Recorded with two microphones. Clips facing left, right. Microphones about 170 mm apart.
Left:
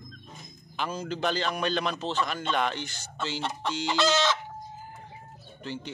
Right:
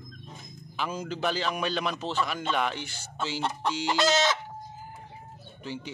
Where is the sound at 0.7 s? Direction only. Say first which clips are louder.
Even; 10° right (ahead or behind).